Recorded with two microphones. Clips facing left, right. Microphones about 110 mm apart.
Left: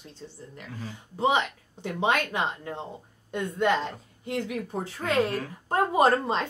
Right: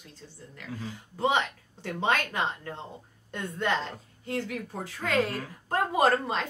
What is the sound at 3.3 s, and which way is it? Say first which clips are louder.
Speech: left 4 dB; 10° left (ahead or behind).